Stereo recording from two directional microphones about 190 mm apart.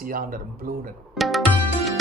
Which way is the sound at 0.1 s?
50° right (ahead or behind).